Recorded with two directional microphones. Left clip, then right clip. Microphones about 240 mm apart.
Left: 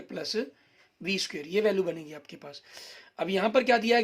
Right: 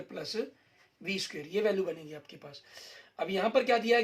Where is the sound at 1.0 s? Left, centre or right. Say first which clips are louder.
Left 4 dB; left.